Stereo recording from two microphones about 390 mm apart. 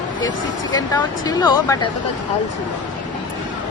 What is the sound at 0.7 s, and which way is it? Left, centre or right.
Speech, centre.